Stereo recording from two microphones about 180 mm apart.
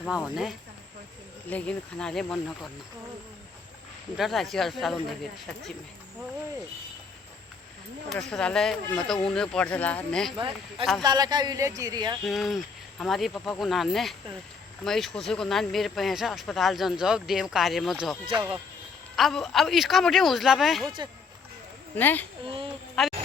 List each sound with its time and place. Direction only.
1.5 s speech: 5° left (ahead or behind)
4.2 s speech: centre (ahead or behind)
8.1 s speech: 5° left (ahead or behind)
10.3 s a man's voice: 30° right (ahead or behind)
12.2 s speech: centre (ahead or behind)
21.9 s speech: 10° left (ahead or behind)
22.4 s a man's voice: 30° right (ahead or behind)
23.0 s a woman's voice: centre (ahead or behind)